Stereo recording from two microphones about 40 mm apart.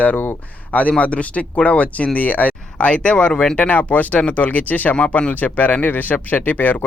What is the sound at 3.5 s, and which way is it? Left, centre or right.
Speech, left.